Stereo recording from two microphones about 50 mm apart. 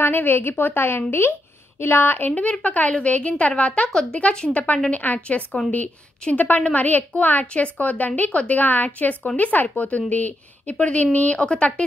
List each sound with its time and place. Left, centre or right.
0.0 s a woman's voice: left